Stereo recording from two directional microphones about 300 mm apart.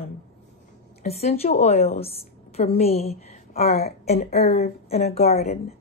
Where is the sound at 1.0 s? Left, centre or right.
Left.